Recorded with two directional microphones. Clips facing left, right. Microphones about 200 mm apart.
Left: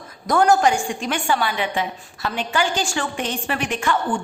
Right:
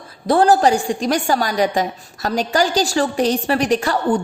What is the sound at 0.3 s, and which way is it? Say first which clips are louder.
A woman's voice: right 3 dB; 30° right (ahead or behind).